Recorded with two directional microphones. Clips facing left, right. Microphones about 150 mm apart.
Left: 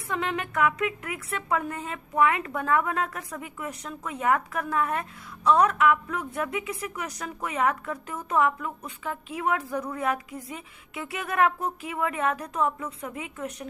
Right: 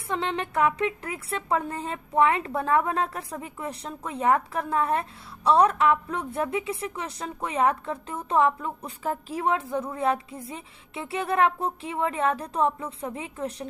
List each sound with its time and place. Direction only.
0.1 s a woman's voice: 30° right (ahead or behind)